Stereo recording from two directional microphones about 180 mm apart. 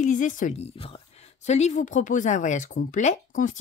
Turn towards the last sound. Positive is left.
turn(degrees=45)  # may be behind; listen again after turning